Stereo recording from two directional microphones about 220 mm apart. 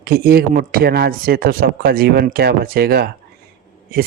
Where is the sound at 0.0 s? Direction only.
45° right (ahead or behind).